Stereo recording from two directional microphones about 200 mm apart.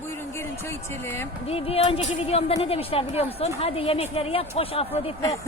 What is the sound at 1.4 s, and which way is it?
A woman's voice, 30° left (ahead or behind).